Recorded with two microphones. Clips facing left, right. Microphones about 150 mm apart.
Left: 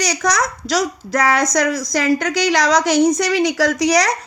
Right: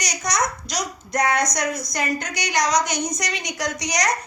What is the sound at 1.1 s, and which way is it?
A woman's voice, 90° left.